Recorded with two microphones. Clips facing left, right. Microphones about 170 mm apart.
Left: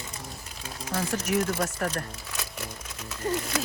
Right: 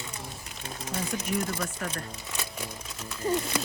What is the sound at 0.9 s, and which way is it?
Speech, 80° left.